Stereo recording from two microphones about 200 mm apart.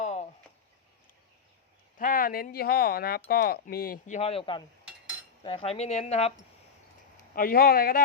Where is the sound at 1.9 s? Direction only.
45° left (ahead or behind).